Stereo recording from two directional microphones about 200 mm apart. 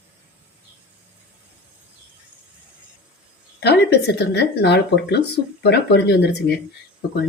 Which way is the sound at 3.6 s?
55° left (ahead or behind).